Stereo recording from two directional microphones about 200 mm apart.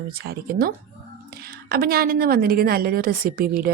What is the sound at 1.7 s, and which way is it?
A woman's voice, 50° right (ahead or behind).